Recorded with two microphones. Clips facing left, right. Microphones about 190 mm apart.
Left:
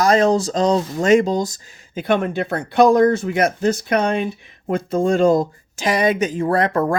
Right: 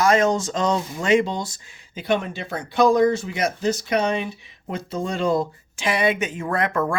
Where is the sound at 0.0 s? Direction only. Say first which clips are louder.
Left 3 dB; 35° left (ahead or behind).